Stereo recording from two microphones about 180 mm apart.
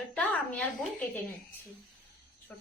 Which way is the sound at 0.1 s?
5° left (ahead or behind).